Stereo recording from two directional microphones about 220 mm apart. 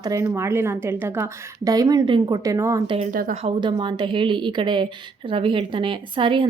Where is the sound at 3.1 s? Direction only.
40° right (ahead or behind).